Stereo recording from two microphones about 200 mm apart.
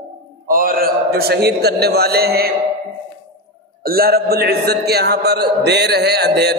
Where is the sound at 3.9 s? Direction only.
50° right (ahead or behind).